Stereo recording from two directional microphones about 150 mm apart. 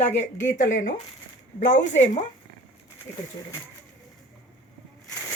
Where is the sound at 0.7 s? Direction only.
60° left (ahead or behind).